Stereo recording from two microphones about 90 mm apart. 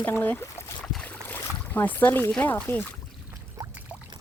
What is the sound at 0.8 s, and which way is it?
Boat, 5° left (ahead or behind).